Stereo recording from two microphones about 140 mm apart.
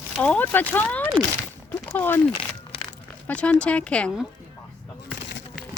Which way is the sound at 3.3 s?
10° left (ahead or behind).